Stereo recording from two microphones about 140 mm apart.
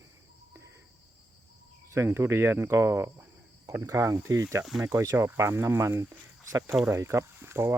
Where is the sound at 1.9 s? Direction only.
20° right (ahead or behind).